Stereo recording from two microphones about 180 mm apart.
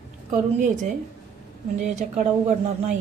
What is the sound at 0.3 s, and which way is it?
A woman's voice, 40° right (ahead or behind).